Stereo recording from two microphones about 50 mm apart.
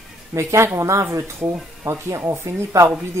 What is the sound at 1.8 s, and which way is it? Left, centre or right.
Speech, right.